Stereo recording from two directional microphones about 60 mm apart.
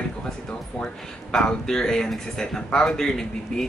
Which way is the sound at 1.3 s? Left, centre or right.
Centre.